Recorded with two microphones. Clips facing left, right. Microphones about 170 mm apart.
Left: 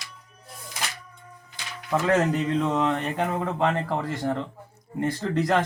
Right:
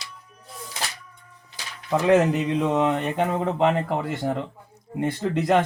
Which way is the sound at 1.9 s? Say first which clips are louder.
Right 4 dB; 20° right (ahead or behind).